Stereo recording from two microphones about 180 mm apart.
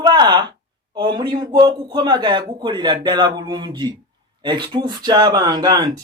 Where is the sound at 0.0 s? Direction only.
25° right (ahead or behind).